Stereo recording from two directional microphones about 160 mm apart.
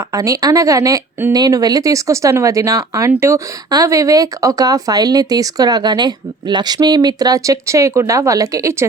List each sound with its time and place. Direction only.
0.1 s speech: 20° right (ahead or behind)